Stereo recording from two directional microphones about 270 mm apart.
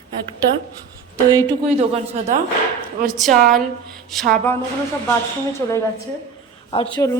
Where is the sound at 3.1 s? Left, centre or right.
Centre.